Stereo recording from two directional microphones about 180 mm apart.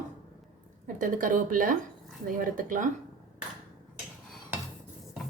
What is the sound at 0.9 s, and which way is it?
A woman's voice, 45° right (ahead or behind).